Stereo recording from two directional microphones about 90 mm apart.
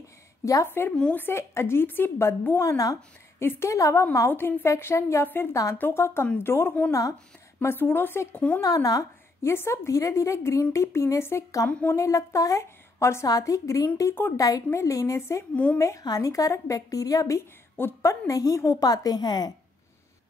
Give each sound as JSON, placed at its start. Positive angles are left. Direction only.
{"t": 0.7, "sound": "a woman's voice", "side_deg": 25}
{"t": 0.9, "sound": "a woman's voice", "side_deg": 10}
{"t": 1.2, "sound": "a woman's voice", "side_deg": 30}
{"t": 2.6, "sound": "a woman's voice", "side_deg": 35}
{"t": 4.3, "sound": "a woman's voice", "side_deg": 25}
{"t": 6.9, "sound": "a woman's voice", "side_deg": 40}
{"t": 7.6, "sound": "a woman's voice", "side_deg": 25}
{"t": 8.5, "sound": "a woman's voice", "side_deg": 40}
{"t": 15.5, "sound": "a woman's voice", "side_deg": 15}
{"t": 15.8, "sound": "a woman's voice", "side_deg": 40}